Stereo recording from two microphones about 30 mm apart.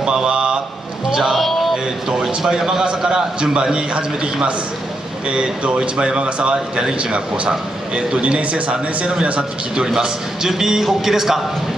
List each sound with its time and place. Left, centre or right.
0.0 s a sound: right
1.5 s a sound: centre
2.2 s speech: centre
2.8 s a man's voice: right
6.5 s a man's voice: right
7.0 s speech: right
8.4 s speech: right
9.0 s speech: right
9.9 s a man's voice: right
10.5 s speech: centre